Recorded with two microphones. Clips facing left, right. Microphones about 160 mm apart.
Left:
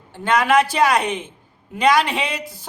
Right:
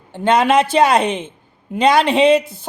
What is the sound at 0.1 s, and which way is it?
Speech, 25° right (ahead or behind).